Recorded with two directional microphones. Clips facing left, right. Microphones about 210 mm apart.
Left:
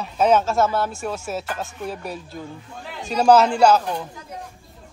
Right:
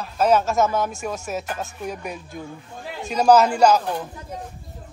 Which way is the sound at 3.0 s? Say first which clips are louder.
Even; 10° right (ahead or behind).